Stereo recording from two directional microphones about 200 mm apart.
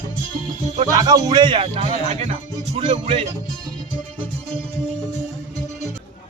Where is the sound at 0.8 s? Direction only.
20° right (ahead or behind).